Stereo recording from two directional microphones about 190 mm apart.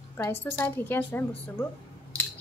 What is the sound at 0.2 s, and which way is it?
A woman's voice, 15° left (ahead or behind).